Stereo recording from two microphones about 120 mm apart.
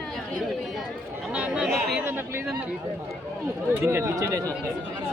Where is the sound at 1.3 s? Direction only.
10° right (ahead or behind).